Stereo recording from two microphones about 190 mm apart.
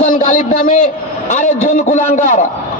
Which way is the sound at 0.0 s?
45° left (ahead or behind).